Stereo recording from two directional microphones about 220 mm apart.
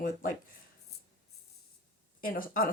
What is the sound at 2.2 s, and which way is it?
Speech, 40° left (ahead or behind).